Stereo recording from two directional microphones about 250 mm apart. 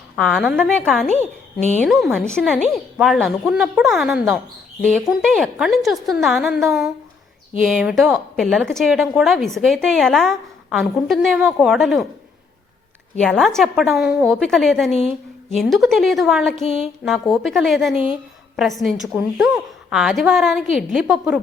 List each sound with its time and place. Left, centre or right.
0.2 s a woman's voice: centre
1.0 s a woman's voice: left
1.9 s a woman's voice: centre
13.1 s a woman's voice: centre